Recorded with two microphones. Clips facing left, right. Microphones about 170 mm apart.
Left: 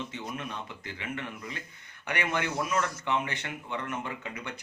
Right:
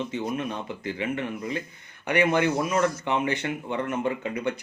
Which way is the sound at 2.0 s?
20° right (ahead or behind).